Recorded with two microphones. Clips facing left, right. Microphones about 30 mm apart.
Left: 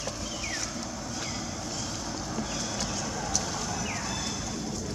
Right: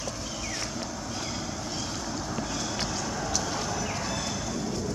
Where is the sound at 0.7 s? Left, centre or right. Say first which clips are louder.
Right 1 dB; centre.